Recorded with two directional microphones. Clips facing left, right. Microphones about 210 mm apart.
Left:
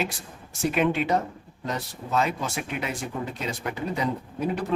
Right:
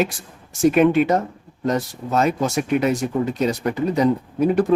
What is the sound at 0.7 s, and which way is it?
Speech, 50° right (ahead or behind).